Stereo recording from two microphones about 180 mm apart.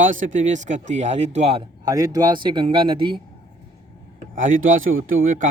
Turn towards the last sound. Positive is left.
turn(degrees=-50)  # may be behind; listen again after turning